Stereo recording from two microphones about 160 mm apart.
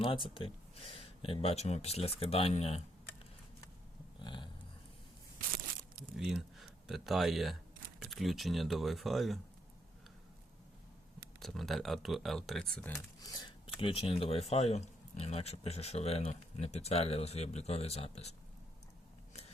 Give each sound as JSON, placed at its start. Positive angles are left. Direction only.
{"t": 0.0, "sound": "speech", "side_deg": 35}
{"t": 4.2, "sound": "a sound", "side_deg": 30}
{"t": 6.1, "sound": "speech", "side_deg": 0}
{"t": 11.3, "sound": "speech", "side_deg": 0}
{"t": 13.2, "sound": "speech", "side_deg": 25}
{"t": 13.7, "sound": "speech", "side_deg": 35}